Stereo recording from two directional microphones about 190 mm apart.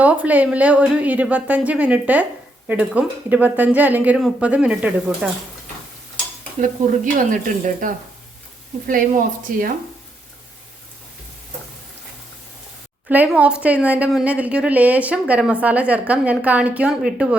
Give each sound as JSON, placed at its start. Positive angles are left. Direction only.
{"t": 0.0, "sound": "speech", "side_deg": -10}
{"t": 6.6, "sound": "speech", "side_deg": -45}
{"t": 13.1, "sound": "speech", "side_deg": -5}